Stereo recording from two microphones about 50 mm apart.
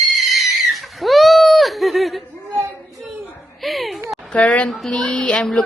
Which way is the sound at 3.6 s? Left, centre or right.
Centre.